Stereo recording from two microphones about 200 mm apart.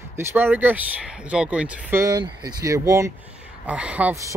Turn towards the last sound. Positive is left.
turn(degrees=-10)  # may be behind; listen again after turning